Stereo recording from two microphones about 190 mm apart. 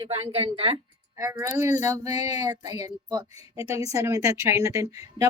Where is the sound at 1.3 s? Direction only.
10° right (ahead or behind).